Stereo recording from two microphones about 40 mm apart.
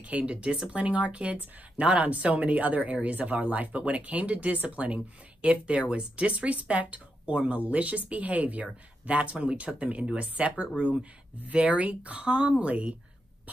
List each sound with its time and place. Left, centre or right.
0.2 s speech: right
11.5 s speech: right